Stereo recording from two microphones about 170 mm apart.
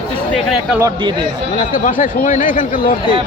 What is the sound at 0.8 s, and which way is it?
Speech, 25° right (ahead or behind).